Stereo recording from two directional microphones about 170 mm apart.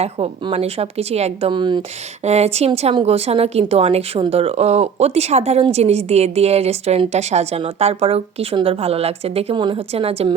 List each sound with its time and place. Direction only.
0.0 s a woman's voice: 35° right (ahead or behind)
2.2 s a woman's voice: 40° right (ahead or behind)